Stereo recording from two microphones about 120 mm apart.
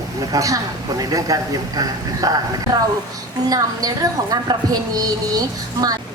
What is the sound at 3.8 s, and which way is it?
Speech, 30° right (ahead or behind).